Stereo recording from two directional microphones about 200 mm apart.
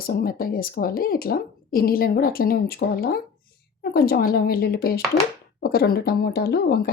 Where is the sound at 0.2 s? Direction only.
45° left (ahead or behind).